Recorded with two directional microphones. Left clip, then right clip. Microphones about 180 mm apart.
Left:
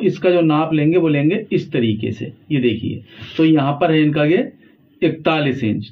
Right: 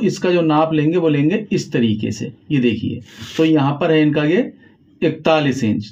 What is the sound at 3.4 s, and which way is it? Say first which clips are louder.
Speech: left 1 dB; 50° right (ahead or behind).